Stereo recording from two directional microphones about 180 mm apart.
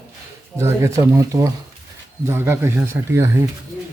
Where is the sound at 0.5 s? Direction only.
15° right (ahead or behind).